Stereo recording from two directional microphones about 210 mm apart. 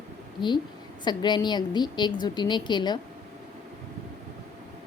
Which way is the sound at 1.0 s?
20° left (ahead or behind).